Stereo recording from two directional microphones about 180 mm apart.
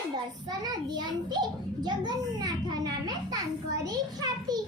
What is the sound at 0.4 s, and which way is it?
A child's voice, 20° right (ahead or behind).